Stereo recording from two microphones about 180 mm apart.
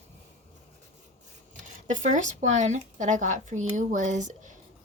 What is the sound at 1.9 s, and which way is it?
Speech, 45° right (ahead or behind).